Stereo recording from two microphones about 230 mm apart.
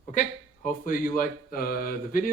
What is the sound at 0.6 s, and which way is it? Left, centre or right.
Speech, left.